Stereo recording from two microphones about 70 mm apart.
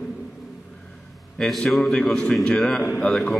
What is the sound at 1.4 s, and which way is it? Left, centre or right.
A man's voice, centre.